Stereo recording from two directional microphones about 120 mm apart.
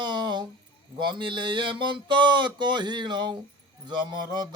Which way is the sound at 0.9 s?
40° right (ahead or behind).